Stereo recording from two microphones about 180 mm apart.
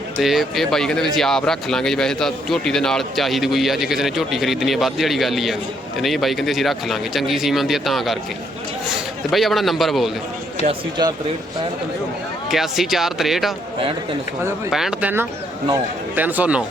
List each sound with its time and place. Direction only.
0.2 s a man's voice: centre (ahead or behind)
10.7 s speech: 25° right (ahead or behind)
12.5 s a man's voice: centre (ahead or behind)
14.7 s a man's voice: centre (ahead or behind)